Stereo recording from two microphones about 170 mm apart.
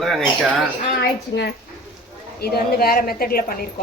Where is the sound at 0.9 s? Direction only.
75° left (ahead or behind).